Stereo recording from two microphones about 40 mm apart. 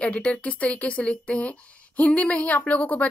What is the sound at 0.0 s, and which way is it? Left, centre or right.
Speech, left.